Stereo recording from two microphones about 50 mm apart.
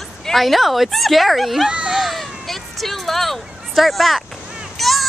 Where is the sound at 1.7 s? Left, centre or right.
Right.